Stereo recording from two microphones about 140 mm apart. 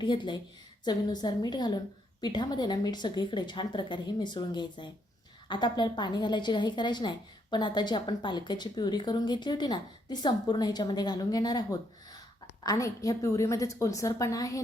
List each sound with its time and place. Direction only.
0.0 s a woman's voice: 35° left (ahead or behind)